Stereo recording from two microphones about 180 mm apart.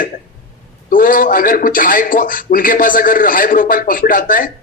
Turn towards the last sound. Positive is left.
turn(degrees=50)  # may be behind; listen again after turning